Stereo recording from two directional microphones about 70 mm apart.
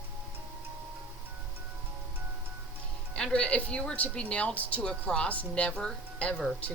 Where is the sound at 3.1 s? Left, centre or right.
Centre.